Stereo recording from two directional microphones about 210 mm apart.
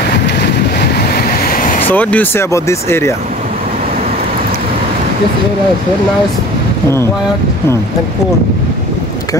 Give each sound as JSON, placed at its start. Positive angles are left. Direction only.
{"t": 0.7, "sound": "waves", "side_deg": 50}
{"t": 1.9, "sound": "speech", "side_deg": 10}